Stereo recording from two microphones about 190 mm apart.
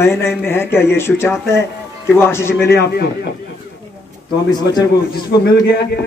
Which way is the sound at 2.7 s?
60° left (ahead or behind).